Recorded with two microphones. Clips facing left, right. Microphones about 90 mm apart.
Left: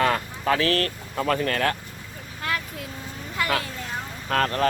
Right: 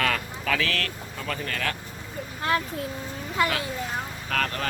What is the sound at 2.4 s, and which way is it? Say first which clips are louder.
A child's voice: right 3 dB; 30° right (ahead or behind).